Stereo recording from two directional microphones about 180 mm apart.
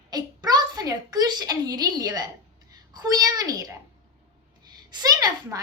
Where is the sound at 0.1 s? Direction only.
20° right (ahead or behind).